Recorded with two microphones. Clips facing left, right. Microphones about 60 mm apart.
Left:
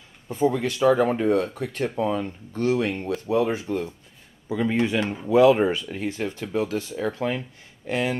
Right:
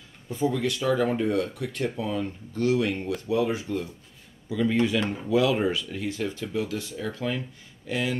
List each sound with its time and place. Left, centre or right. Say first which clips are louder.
0.3 s speech: left 3 dB; left
5.0 s speech: left 1 dB; centre
5.3 s speech: left 7 dB; left